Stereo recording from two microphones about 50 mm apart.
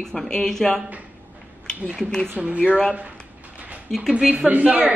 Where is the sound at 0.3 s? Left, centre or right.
Centre.